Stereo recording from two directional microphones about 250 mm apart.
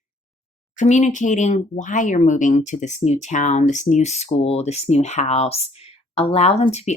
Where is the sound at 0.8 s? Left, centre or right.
Left.